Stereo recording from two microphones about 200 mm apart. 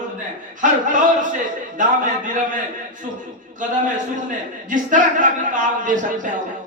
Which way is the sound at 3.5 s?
40° right (ahead or behind).